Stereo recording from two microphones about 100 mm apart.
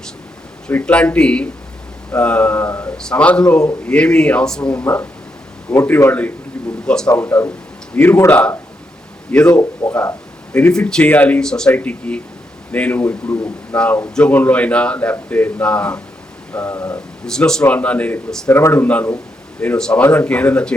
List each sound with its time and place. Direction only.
0.7 s speech: 15° left (ahead or behind)
7.2 s speech: 20° left (ahead or behind)
9.5 s speech: 35° left (ahead or behind)
10.5 s speech: 10° left (ahead or behind)
13.2 s speech: 35° left (ahead or behind)
13.7 s speech: 15° left (ahead or behind)
16.9 s speech: 5° left (ahead or behind)
18.5 s speech: 20° left (ahead or behind)